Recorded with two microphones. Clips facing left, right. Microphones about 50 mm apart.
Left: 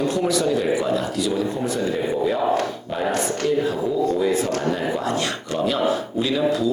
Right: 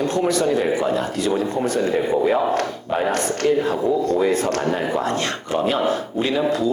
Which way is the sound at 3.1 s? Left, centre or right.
Right.